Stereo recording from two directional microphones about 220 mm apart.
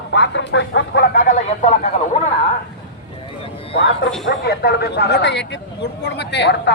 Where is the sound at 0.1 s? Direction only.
55° left (ahead or behind); by 1.9 s 30° left (ahead or behind).